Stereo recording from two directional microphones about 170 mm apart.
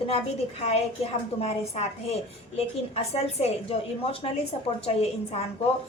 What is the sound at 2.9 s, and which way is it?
A woman's voice, 35° left (ahead or behind).